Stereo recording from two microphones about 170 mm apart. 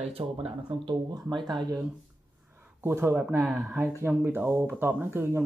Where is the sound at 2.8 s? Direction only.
15° right (ahead or behind).